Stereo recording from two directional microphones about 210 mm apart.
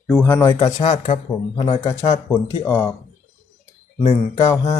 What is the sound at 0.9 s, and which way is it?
Speech, 30° left (ahead or behind).